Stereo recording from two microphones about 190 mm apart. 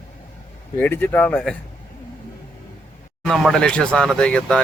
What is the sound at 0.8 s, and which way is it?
Speech, 10° left (ahead or behind).